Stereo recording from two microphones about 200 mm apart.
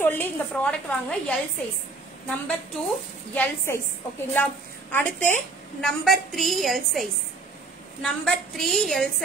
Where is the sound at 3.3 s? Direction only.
15° left (ahead or behind).